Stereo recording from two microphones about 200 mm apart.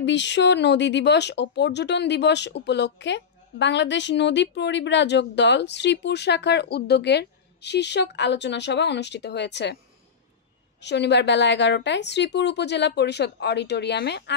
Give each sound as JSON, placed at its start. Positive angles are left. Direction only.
{"t": 0.0, "sound": "speech", "side_deg": 60}
{"t": 10.8, "sound": "speech", "side_deg": 60}